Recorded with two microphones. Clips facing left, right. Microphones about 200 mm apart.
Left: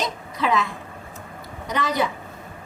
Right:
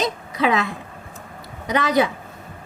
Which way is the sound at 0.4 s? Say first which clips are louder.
Right 2 dB; 75° right (ahead or behind).